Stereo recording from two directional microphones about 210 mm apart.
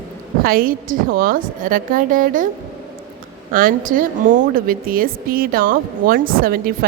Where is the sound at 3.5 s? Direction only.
40° right (ahead or behind).